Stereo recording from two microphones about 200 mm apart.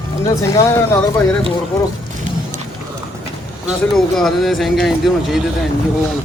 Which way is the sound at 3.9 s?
Centre (ahead or behind).